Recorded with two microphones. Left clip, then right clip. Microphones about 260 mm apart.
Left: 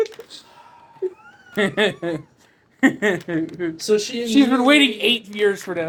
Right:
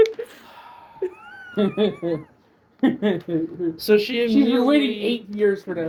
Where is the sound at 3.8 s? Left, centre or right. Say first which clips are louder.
Right 2 dB; right.